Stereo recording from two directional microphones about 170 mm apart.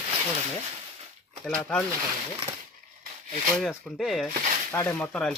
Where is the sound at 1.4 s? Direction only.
5° left (ahead or behind).